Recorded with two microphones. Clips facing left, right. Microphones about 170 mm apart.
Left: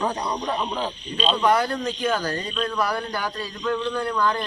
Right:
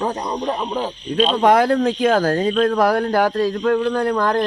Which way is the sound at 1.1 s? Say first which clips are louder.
Right 6 dB; 75° right (ahead or behind).